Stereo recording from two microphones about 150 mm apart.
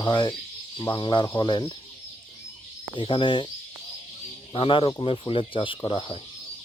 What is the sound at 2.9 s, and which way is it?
Speech, 35° left (ahead or behind).